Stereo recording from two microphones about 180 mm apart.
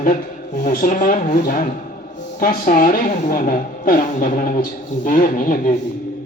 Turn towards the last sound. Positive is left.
turn(degrees=45)  # may be behind; listen again after turning